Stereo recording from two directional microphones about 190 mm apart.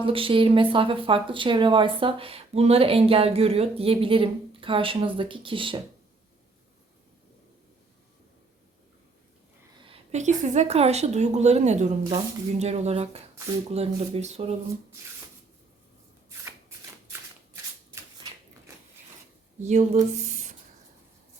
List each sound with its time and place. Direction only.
0.0 s speech: 30° right (ahead or behind)
9.8 s speech: 35° right (ahead or behind)
16.5 s shuffling cards: 10° right (ahead or behind)
19.6 s speech: 35° right (ahead or behind)